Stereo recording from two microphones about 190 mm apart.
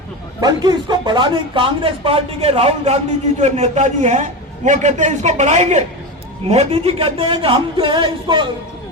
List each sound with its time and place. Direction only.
0.4 s speech: 20° right (ahead or behind)